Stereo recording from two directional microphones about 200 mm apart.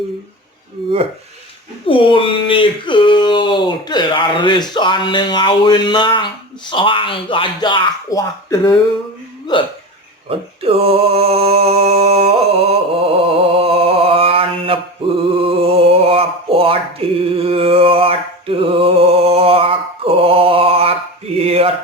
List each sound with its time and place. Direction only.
1.9 s speech: 25° left (ahead or behind)
10.2 s a sound: 30° right (ahead or behind)
21.3 s mantra: 30° right (ahead or behind)